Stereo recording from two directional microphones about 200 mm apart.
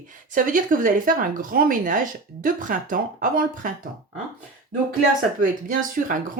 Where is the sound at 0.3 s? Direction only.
45° right (ahead or behind).